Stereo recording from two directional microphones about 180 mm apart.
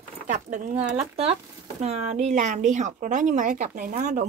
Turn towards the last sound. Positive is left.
turn(degrees=-40)  # may be behind; listen again after turning